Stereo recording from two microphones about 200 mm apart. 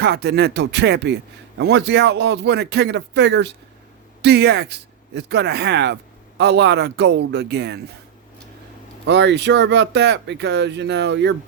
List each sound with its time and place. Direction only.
0.0 s speech: 55° right (ahead or behind)
9.0 s speech: 60° right (ahead or behind)